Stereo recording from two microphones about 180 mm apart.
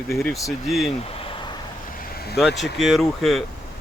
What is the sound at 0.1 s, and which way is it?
Speech, centre (ahead or behind).